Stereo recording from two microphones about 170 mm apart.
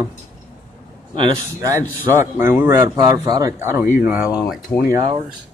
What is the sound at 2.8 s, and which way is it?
Speech, 25° right (ahead or behind).